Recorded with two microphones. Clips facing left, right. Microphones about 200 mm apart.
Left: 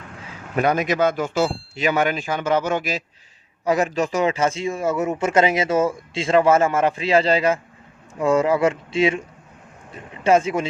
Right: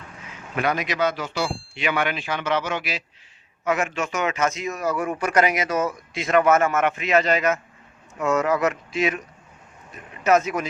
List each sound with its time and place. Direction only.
0.5 s speech: 40° left (ahead or behind)
3.6 s a man's voice: 35° left (ahead or behind)